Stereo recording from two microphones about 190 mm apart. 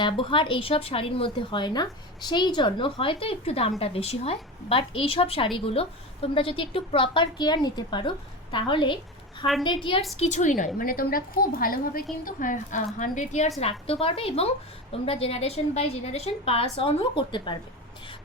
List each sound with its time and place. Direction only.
0.0 s speech: 25° left (ahead or behind)
10.2 s a woman's voice: 35° left (ahead or behind)